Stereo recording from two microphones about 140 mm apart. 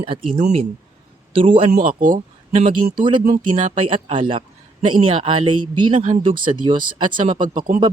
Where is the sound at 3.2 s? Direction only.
60° right (ahead or behind).